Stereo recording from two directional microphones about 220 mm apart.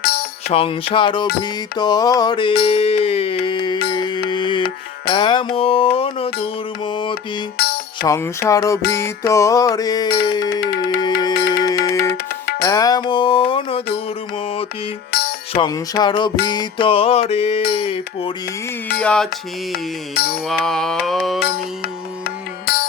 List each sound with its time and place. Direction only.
0.0 s music: 45° left (ahead or behind)
0.4 s music: 25° left (ahead or behind)
7.6 s music: 45° left (ahead or behind)
8.0 s music: 10° left (ahead or behind)
10.5 s music: 45° left (ahead or behind)
11.0 s music: 20° left (ahead or behind)
11.3 s music: 45° left (ahead or behind)
11.9 s music: 15° left (ahead or behind)
15.5 s music: 20° left (ahead or behind)
18.9 s mantra: 5° left (ahead or behind)
20.1 s mantra: 45° left (ahead or behind)
20.5 s mantra: centre (ahead or behind)
22.6 s music: 45° left (ahead or behind)